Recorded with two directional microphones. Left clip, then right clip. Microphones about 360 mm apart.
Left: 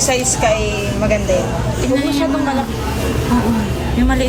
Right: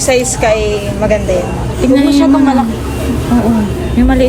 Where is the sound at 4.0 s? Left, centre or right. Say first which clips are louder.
Right 6 dB; centre.